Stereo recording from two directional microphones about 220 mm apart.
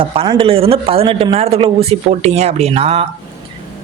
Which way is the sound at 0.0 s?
25° right (ahead or behind).